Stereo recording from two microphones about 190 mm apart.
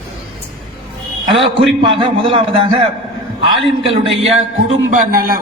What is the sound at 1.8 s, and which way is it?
A man's voice, 25° right (ahead or behind).